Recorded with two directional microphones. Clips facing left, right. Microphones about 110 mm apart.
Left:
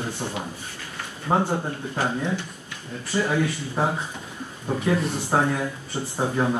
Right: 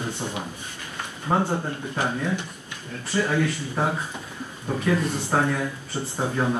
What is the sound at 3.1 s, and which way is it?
Speech, 15° left (ahead or behind).